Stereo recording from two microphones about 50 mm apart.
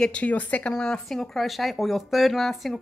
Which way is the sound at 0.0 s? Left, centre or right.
Left.